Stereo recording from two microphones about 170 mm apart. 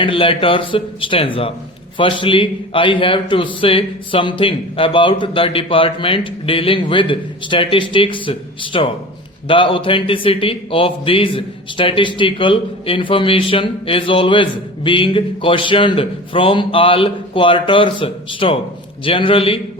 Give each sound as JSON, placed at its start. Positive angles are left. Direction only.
{"t": 0.0, "sound": "speech", "side_deg": 30}